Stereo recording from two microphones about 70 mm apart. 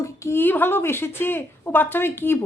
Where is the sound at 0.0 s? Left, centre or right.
Left.